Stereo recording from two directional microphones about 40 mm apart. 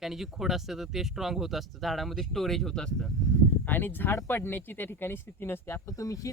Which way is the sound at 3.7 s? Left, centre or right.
Left.